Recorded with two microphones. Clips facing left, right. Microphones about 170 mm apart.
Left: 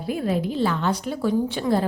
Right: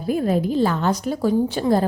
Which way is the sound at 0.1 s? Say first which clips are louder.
Right 4 dB; 45° right (ahead or behind).